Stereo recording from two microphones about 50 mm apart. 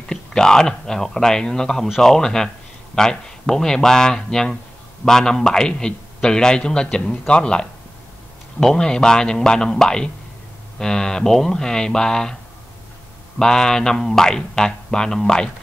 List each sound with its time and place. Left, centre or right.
0.1 s a man's voice: centre
13.4 s a man's voice: centre